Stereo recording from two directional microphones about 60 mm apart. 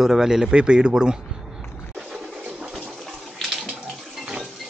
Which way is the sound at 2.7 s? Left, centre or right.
Centre.